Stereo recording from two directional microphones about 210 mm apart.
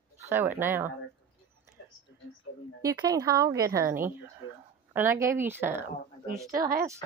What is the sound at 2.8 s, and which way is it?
A woman's voice, 15° right (ahead or behind).